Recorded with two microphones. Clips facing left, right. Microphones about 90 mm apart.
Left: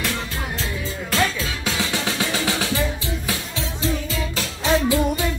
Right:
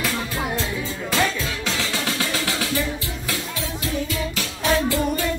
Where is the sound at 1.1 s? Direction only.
Centre (ahead or behind).